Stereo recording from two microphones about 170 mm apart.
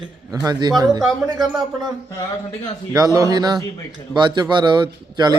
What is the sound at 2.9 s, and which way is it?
Speech, 20° right (ahead or behind).